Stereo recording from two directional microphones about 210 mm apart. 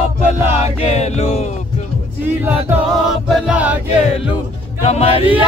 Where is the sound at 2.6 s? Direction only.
5° right (ahead or behind).